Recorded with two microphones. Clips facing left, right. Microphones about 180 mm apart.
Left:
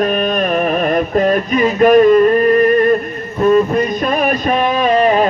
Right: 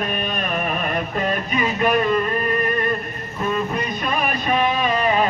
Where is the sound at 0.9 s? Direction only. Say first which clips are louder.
Left 10 dB; 45° left (ahead or behind).